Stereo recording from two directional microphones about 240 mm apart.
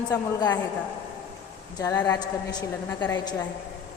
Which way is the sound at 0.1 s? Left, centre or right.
Centre.